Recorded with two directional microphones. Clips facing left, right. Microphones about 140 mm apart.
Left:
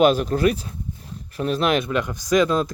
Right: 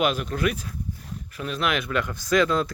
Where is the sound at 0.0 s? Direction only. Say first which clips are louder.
Left 7 dB; 35° left (ahead or behind).